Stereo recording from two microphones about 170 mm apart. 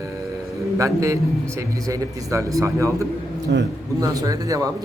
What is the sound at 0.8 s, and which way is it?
A man's voice, 20° right (ahead or behind).